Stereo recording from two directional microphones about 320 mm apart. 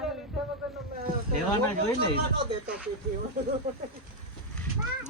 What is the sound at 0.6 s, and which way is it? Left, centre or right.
Speech, centre.